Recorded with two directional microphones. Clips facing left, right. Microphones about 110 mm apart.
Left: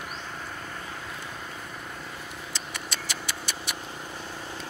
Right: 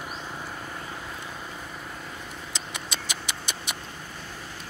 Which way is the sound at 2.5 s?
15° right (ahead or behind).